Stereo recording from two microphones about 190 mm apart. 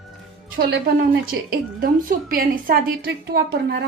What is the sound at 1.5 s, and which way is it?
A woman's voice, 50° right (ahead or behind).